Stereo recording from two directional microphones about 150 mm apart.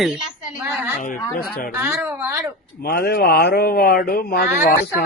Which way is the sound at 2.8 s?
90° left.